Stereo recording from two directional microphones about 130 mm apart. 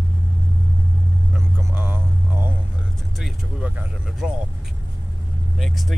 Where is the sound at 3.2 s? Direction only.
Centre (ahead or behind).